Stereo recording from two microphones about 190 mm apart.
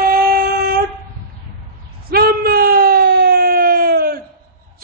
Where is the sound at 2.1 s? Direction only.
55° right (ahead or behind).